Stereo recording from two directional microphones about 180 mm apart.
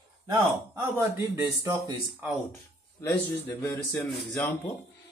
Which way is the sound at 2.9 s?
15° left (ahead or behind).